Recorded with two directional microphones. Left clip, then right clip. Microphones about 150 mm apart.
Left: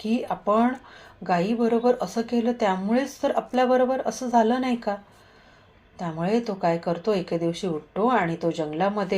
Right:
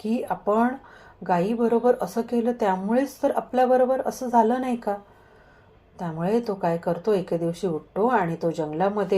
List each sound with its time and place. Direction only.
0.1 s a woman's voice: 30° right (ahead or behind)
6.0 s a woman's voice: 30° right (ahead or behind)